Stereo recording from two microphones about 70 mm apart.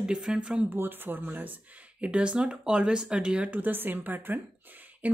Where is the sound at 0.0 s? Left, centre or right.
Centre.